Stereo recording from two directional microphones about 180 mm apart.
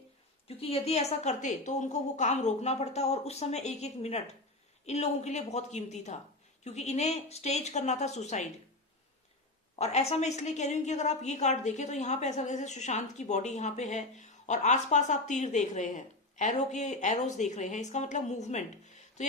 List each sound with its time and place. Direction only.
0.4 s a woman's voice: 35° left (ahead or behind)
9.7 s a woman's voice: 35° left (ahead or behind)